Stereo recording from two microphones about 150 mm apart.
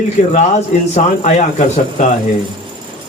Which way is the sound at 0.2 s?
55° left (ahead or behind).